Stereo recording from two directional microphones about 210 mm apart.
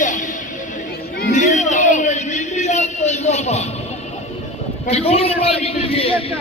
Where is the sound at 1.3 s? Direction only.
35° left (ahead or behind).